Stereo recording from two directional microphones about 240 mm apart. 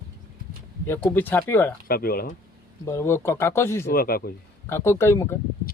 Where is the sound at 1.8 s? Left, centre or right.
Left.